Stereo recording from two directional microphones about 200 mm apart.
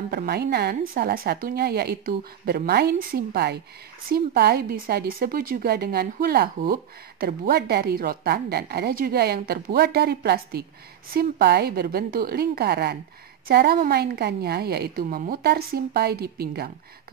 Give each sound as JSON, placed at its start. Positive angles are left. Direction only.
{"t": 0.1, "sound": "speech", "side_deg": -50}